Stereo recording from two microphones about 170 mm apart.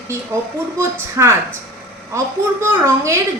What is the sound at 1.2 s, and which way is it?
A woman's voice, 15° right (ahead or behind).